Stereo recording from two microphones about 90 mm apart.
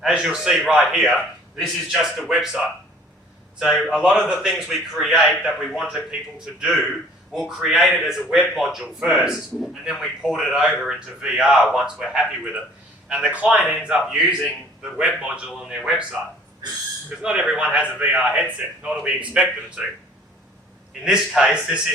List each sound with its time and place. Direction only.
0.0 s a man's voice: 5° right (ahead or behind)
1.1 s speech: 5° left (ahead or behind)
3.6 s a man's voice: centre (ahead or behind)
16.6 s speech: 50° right (ahead or behind)
17.2 s a man's voice: 10° right (ahead or behind)
21.0 s a man's voice: 10° right (ahead or behind)